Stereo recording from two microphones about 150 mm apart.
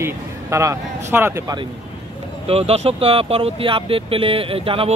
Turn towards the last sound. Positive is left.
turn(degrees=-40)  # may be behind; listen again after turning